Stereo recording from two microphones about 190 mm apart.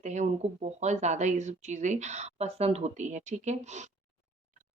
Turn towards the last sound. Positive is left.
turn(degrees=-40)  # may be behind; listen again after turning